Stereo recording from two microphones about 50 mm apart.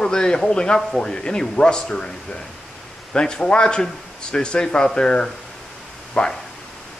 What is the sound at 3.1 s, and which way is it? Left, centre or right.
Speech, centre.